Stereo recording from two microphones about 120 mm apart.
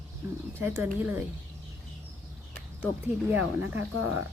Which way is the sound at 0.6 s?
15° right (ahead or behind).